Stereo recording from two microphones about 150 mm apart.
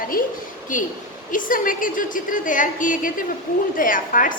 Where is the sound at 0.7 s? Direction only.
60° left (ahead or behind).